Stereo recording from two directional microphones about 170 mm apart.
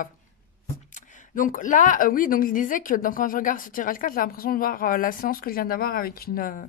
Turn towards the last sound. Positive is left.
turn(degrees=55)  # may be behind; listen again after turning